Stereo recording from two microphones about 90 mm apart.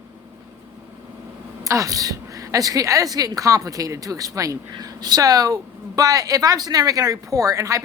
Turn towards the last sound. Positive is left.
turn(degrees=-35)  # may be behind; listen again after turning